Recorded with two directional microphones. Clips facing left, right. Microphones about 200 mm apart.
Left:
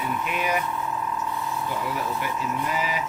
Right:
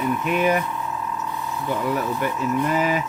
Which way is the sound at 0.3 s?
50° right (ahead or behind).